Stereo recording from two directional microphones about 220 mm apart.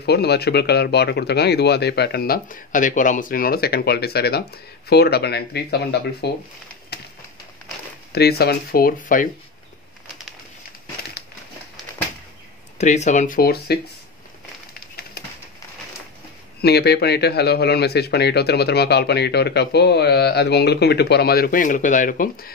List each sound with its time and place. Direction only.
0.0 s speech: 50° left (ahead or behind)
8.1 s speech: 45° left (ahead or behind)
12.7 s speech: 30° left (ahead or behind)
16.6 s speech: 50° left (ahead or behind)